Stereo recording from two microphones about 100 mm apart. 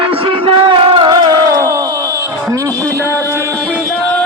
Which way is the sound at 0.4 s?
60° right (ahead or behind).